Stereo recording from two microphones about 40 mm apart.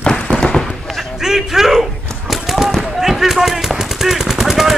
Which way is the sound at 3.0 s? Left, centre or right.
Centre.